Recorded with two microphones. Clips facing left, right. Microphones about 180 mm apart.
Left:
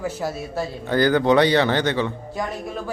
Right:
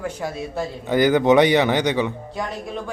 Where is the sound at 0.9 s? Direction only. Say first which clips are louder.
Right 2 dB; 20° right (ahead or behind).